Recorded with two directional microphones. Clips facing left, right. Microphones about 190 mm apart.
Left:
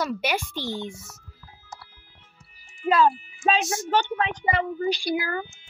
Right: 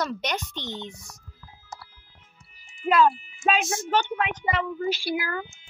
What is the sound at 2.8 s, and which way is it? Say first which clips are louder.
Speech: even; 5° right (ahead or behind).